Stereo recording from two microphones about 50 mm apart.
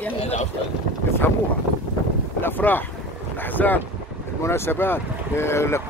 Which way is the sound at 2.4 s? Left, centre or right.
Left.